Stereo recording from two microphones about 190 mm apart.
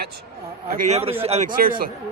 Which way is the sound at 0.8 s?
35° right (ahead or behind).